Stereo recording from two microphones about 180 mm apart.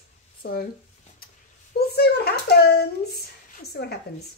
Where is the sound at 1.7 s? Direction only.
65° left (ahead or behind).